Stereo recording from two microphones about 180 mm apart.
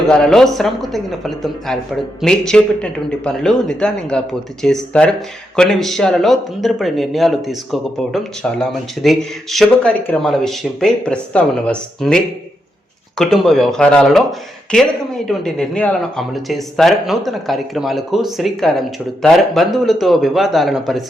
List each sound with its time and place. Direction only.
0.1 s speech: 5° left (ahead or behind)